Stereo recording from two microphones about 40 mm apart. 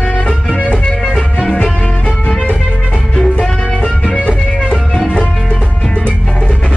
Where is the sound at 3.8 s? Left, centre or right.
Left.